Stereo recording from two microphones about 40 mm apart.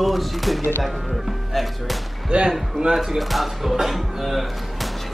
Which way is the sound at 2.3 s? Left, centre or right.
Right.